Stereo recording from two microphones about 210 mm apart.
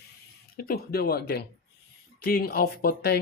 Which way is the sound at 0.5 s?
45° left (ahead or behind).